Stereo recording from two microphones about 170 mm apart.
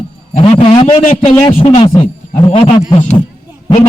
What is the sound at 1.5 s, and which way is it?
Speech, 35° left (ahead or behind).